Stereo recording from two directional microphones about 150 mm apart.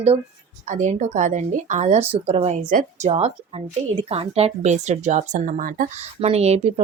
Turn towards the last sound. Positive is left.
turn(degrees=-45)  # may be behind; listen again after turning